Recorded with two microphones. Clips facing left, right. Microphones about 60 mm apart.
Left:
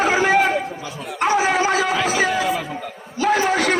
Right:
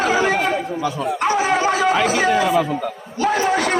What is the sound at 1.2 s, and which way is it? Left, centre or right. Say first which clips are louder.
A man's voice: left 1 dB; centre.